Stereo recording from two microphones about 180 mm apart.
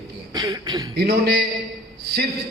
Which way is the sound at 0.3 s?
25° right (ahead or behind).